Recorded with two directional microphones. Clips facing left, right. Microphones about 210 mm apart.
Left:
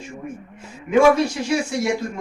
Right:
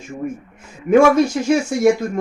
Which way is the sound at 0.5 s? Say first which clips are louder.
Right 5 dB; 45° right (ahead or behind).